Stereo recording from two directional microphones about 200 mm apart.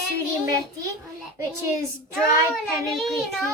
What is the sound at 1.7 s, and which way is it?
Speech, 15° right (ahead or behind).